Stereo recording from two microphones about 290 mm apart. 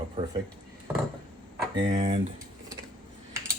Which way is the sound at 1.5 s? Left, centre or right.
Centre.